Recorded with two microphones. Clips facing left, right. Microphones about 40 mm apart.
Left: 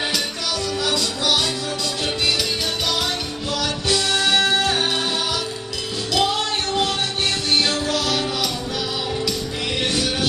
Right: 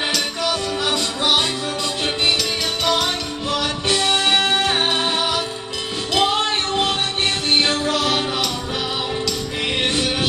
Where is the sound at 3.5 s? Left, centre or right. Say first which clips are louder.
Right 2 dB; right.